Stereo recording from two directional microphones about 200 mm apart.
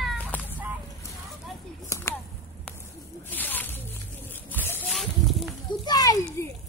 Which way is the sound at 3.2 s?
10° left (ahead or behind).